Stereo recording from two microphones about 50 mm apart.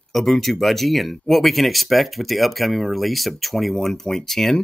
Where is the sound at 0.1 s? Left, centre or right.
Centre.